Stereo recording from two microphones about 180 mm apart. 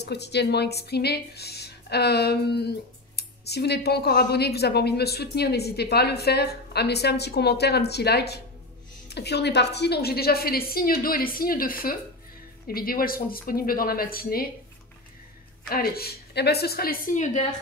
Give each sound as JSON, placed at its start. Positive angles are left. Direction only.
{"t": 0.0, "sound": "speech", "side_deg": 65}
{"t": 15.7, "sound": "speech", "side_deg": 60}